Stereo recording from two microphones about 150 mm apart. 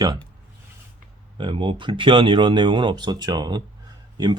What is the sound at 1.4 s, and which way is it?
Speech, 35° right (ahead or behind).